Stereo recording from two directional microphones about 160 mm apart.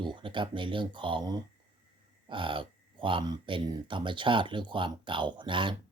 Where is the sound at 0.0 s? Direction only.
30° right (ahead or behind).